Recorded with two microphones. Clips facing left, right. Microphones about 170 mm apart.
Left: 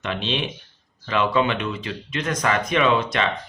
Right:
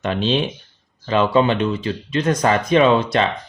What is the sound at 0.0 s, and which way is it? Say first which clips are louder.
Speech: right 7 dB; 40° right (ahead or behind).